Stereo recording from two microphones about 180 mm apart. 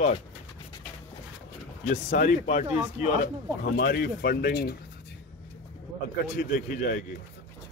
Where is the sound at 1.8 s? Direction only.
45° left (ahead or behind).